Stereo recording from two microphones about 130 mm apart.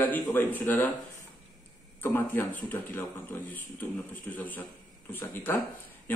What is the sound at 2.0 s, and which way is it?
A man's voice, 15° left (ahead or behind).